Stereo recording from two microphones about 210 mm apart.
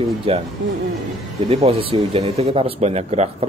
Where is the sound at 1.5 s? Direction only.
25° right (ahead or behind).